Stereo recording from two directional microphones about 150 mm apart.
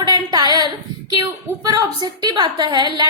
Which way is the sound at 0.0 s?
25° right (ahead or behind).